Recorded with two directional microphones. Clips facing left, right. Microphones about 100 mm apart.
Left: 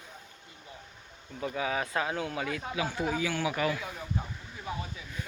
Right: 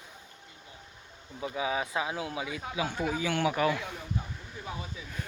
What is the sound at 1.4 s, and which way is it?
A man's voice, 15° right (ahead or behind).